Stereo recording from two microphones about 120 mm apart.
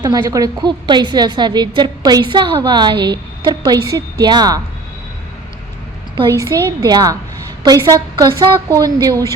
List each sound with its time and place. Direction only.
0.0 s a woman's voice: 30° right (ahead or behind)
6.3 s a woman's voice: 25° right (ahead or behind)